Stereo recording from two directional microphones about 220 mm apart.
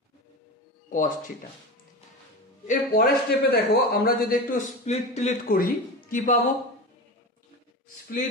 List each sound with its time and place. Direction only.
0.8 s speech: 35° left (ahead or behind)
2.6 s a man's voice: 40° left (ahead or behind)